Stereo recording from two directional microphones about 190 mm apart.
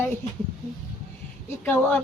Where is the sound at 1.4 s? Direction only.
10° left (ahead or behind).